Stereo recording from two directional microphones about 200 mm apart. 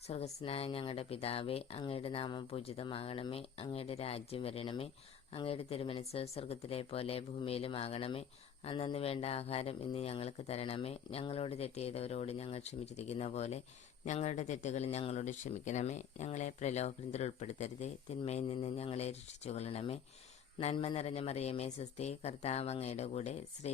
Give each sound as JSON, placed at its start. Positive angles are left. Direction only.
{"t": 0.1, "sound": "speech", "side_deg": 30}